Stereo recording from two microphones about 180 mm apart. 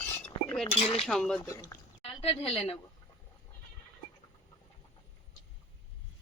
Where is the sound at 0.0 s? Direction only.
10° left (ahead or behind).